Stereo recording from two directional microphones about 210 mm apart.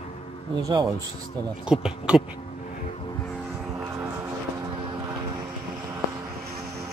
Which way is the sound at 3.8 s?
10° right (ahead or behind).